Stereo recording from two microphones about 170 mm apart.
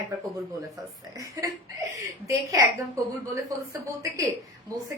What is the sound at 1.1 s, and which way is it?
A woman's voice, 20° right (ahead or behind).